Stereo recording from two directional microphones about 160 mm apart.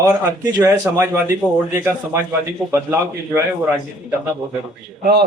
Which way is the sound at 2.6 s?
15° right (ahead or behind).